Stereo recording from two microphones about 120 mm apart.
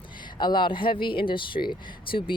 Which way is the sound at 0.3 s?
40° left (ahead or behind).